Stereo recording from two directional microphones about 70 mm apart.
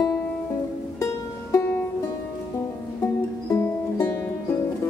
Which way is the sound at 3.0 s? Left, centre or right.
Left.